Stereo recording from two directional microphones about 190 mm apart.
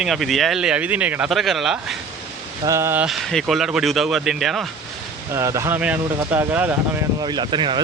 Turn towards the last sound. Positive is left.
turn(degrees=-25)  # may be behind; listen again after turning